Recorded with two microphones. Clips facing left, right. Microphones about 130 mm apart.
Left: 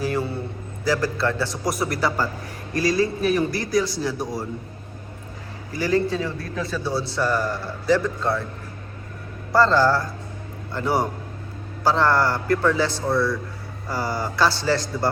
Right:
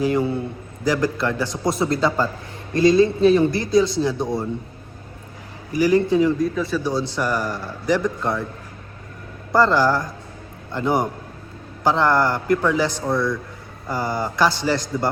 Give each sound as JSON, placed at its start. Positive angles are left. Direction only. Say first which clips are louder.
{"t": 0.0, "sound": "a man's voice", "louder": "right 5 dB", "side_deg": -20}
{"t": 5.7, "sound": "a man's voice", "louder": "right 5 dB", "side_deg": -15}
{"t": 6.6, "sound": "speech", "louder": "right 4 dB", "side_deg": 0}
{"t": 6.8, "sound": "a man's voice", "louder": "right 1 dB", "side_deg": -15}
{"t": 9.5, "sound": "a man's voice", "louder": "right 1 dB", "side_deg": -15}